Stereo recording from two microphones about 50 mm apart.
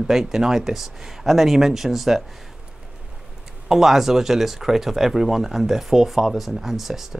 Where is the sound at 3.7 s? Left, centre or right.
Centre.